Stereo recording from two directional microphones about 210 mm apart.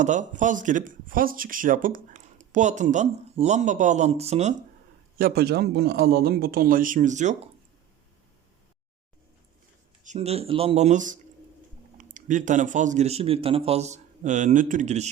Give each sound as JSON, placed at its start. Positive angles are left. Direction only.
{"t": 0.0, "sound": "speech", "side_deg": -35}
{"t": 5.1, "sound": "a man's voice", "side_deg": -45}
{"t": 10.0, "sound": "speech", "side_deg": -35}